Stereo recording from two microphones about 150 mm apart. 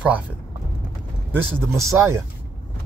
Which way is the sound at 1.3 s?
15° right (ahead or behind).